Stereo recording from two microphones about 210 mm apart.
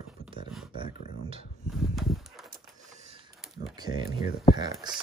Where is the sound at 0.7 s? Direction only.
25° right (ahead or behind).